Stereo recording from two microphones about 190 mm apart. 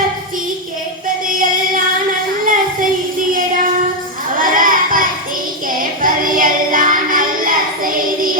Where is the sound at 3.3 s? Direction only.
45° right (ahead or behind).